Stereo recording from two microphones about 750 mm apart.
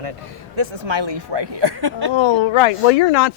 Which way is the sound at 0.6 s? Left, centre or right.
Right.